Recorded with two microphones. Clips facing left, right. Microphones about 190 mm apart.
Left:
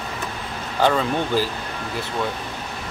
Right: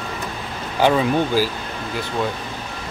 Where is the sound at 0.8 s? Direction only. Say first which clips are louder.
Right 3 dB; 10° right (ahead or behind).